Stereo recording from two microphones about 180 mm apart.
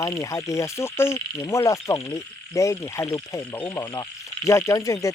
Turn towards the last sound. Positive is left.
turn(degrees=20)  # may be behind; listen again after turning